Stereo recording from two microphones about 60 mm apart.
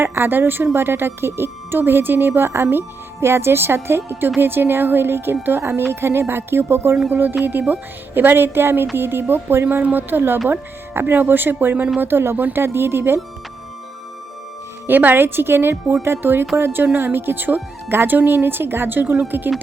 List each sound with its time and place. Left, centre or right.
0.0 s a woman's voice: right
14.8 s a woman's voice: right